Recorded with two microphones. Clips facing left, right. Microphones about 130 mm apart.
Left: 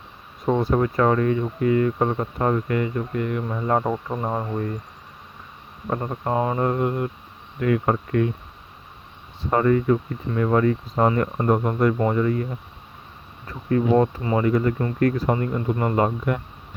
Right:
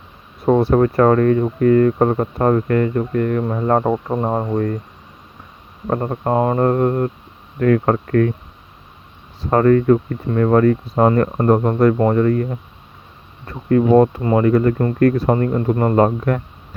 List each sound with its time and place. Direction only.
0.4 s speech: 60° right (ahead or behind)
5.9 s speech: 55° right (ahead or behind)
9.5 s speech: 55° right (ahead or behind)